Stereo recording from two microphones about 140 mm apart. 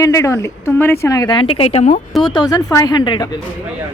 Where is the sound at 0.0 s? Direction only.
20° left (ahead or behind); by 2.0 s 50° left (ahead or behind).